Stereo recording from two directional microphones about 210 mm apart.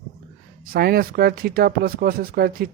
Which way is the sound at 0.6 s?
45° right (ahead or behind).